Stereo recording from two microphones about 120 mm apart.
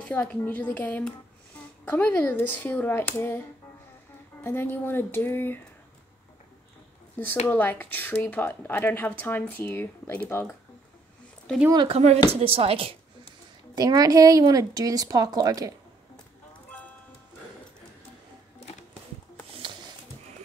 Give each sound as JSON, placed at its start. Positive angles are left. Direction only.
{"t": 0.0, "sound": "speech", "side_deg": 10}
{"t": 7.4, "sound": "speech", "side_deg": 15}
{"t": 11.9, "sound": "speech", "side_deg": -65}
{"t": 13.7, "sound": "a woman's voice", "side_deg": -30}
{"t": 19.5, "sound": "music", "side_deg": -45}